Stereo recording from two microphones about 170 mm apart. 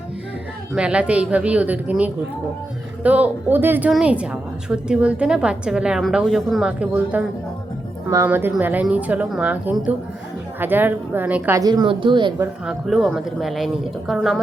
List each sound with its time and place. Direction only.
0.7 s a woman's voice: 5° right (ahead or behind)
11.6 s a woman's voice: 25° right (ahead or behind)
12.6 s speech: centre (ahead or behind)